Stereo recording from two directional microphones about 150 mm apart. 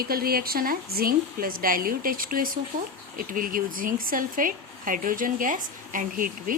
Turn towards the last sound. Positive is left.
turn(degrees=-65)  # may be behind; listen again after turning